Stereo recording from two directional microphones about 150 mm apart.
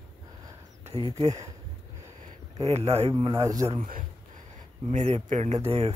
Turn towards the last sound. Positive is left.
turn(degrees=-40)  # may be behind; listen again after turning